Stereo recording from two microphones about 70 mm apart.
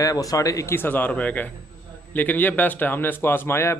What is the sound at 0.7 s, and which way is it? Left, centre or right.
A man's voice, left.